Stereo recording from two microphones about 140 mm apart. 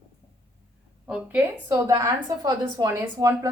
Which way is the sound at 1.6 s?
25° right (ahead or behind).